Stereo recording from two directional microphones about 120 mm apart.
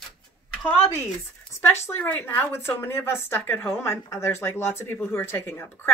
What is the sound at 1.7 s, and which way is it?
A woman's voice, 20° left (ahead or behind).